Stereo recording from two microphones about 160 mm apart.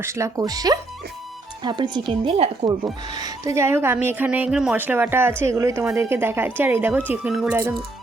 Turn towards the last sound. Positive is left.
turn(degrees=-15)  # may be behind; listen again after turning